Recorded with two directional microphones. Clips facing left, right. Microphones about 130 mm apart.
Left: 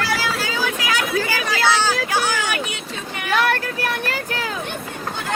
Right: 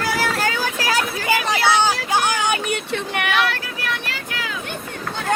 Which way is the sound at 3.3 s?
50° left (ahead or behind).